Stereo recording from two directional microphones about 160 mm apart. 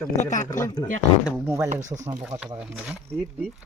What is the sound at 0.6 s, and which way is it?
Speech, 25° left (ahead or behind).